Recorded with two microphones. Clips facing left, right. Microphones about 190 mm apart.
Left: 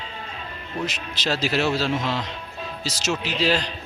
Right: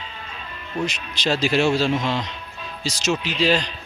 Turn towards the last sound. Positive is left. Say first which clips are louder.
# right 2 dB
turn(degrees=10)  # may be behind; listen again after turning